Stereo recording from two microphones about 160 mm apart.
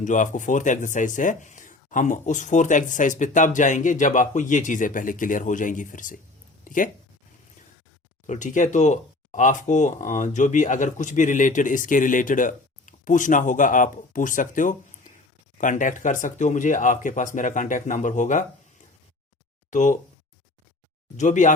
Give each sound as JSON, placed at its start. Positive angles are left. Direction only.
{"t": 0.0, "sound": "speech", "side_deg": 50}
{"t": 8.3, "sound": "speech", "side_deg": 50}
{"t": 19.7, "sound": "speech", "side_deg": 50}
{"t": 21.2, "sound": "speech", "side_deg": 50}